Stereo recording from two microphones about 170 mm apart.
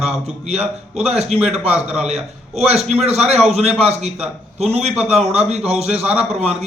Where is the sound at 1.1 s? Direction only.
35° right (ahead or behind).